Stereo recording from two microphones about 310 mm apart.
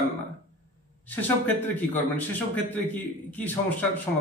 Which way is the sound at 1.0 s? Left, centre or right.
Centre.